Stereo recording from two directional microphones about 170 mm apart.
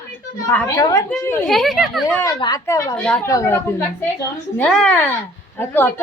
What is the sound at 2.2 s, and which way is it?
Speech, 20° left (ahead or behind).